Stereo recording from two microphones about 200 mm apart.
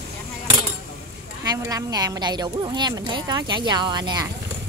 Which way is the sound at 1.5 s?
15° right (ahead or behind).